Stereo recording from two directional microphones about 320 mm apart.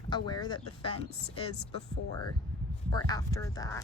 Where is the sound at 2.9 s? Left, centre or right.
Centre.